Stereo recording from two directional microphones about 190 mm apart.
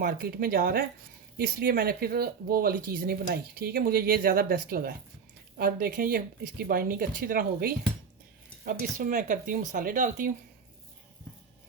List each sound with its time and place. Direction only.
0.0 s speech: 50° right (ahead or behind)